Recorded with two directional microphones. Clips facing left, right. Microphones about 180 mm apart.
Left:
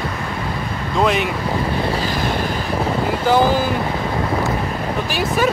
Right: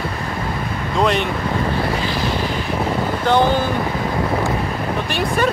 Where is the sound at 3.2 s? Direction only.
5° left (ahead or behind).